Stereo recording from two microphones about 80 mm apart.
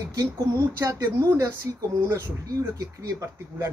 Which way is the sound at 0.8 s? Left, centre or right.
Right.